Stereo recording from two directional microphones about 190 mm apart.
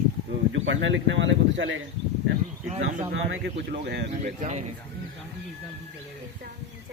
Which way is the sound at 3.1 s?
70° right (ahead or behind).